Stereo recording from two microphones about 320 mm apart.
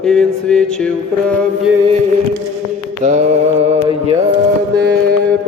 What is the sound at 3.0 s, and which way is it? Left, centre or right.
Mantra, right.